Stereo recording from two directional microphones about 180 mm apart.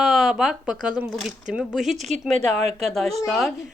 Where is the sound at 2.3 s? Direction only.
40° right (ahead or behind).